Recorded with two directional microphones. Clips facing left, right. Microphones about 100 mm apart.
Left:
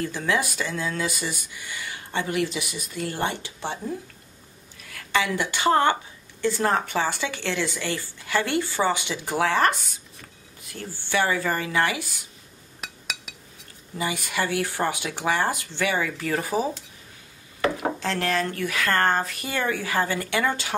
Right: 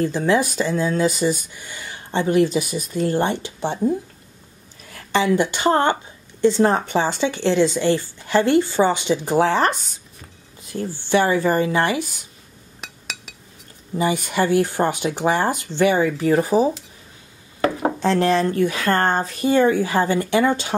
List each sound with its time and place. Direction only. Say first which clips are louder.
0.0 s speech: right 7 dB; 30° right (ahead or behind)
4.8 s a woman's voice: right 6 dB; 30° right (ahead or behind)
12.8 s chink: even; centre (ahead or behind)
13.9 s a woman's voice: right 7 dB; 30° right (ahead or behind)
17.8 s a woman's voice: right 8 dB; 25° right (ahead or behind)